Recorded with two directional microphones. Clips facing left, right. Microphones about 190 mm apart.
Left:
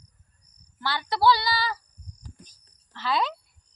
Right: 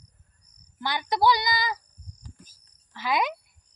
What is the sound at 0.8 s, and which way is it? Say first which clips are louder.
Speech: right 1 dB; 15° right (ahead or behind).